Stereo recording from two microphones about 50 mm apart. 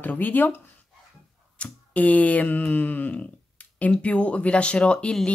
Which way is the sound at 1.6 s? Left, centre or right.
Left.